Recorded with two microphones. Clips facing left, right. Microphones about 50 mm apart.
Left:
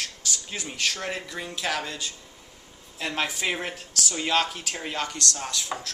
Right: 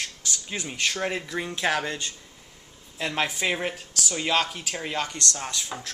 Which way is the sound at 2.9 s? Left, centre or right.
Centre.